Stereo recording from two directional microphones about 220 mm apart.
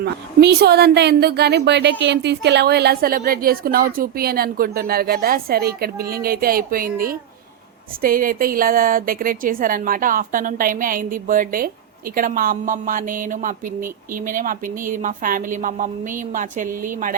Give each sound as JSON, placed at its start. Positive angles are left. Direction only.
{"t": 0.0, "sound": "a woman's voice", "side_deg": -50}